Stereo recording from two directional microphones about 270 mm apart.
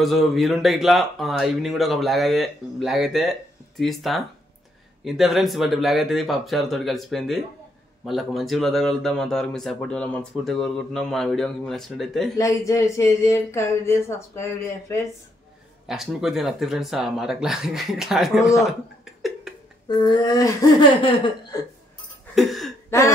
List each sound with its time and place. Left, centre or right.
0.0 s speech: centre
12.4 s speech: centre
15.9 s speech: centre
19.5 s a sound: centre
19.9 s speech: centre
22.3 s a sound: centre